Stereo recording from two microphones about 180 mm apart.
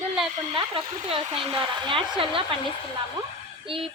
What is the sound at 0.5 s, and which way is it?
Speech, 30° right (ahead or behind).